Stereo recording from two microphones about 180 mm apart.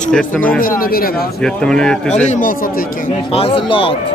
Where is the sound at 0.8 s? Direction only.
55° left (ahead or behind).